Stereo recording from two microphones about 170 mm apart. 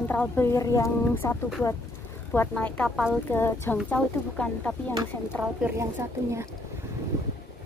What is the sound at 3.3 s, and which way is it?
A woman's voice, 15° left (ahead or behind).